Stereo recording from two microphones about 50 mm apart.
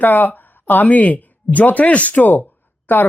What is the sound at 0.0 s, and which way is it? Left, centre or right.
Speech, left.